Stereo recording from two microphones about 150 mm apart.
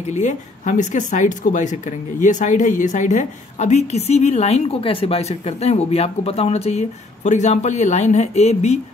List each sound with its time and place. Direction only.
0.1 s speech: 55° left (ahead or behind)